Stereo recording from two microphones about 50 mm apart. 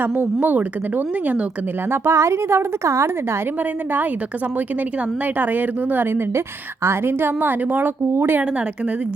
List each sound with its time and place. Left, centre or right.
0.0 s a woman's voice: right
1.9 s a woman's voice: right
3.6 s a woman's voice: right
5.2 s a woman's voice: right
8.1 s a woman's voice: right